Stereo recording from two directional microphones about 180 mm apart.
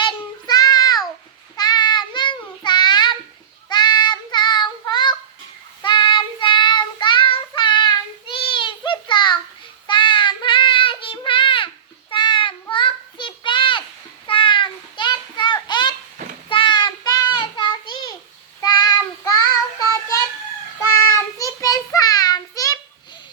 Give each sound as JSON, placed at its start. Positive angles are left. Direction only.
{"t": 0.0, "sound": "child singing", "side_deg": 25}
{"t": 14.3, "sound": "a sound", "side_deg": 30}
{"t": 16.5, "sound": "child singing", "side_deg": 25}
{"t": 21.3, "sound": "child singing", "side_deg": 20}